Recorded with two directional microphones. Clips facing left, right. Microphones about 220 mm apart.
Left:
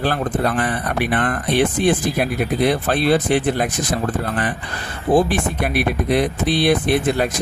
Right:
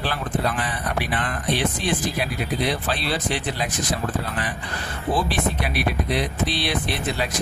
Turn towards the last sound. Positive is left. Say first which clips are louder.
# left 8 dB
turn(degrees=50)  # may be behind; listen again after turning